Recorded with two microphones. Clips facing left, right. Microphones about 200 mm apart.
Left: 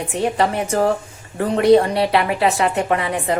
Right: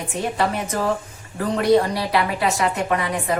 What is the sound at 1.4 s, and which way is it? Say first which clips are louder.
Speech: left 4 dB; 25° left (ahead or behind).